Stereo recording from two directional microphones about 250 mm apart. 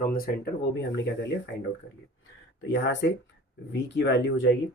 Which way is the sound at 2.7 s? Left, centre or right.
Left.